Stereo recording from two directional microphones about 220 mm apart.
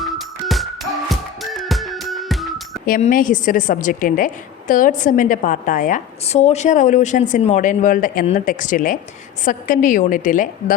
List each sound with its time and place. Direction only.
0.0 s music: centre (ahead or behind)
2.8 s a woman's voice: 40° left (ahead or behind)